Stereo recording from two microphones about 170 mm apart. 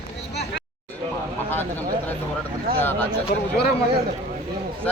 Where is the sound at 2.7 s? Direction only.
60° right (ahead or behind).